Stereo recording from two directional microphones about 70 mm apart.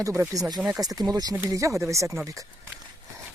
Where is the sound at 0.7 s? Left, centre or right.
Right.